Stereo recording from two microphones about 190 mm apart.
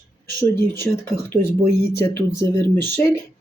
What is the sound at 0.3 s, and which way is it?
Speech, 15° left (ahead or behind).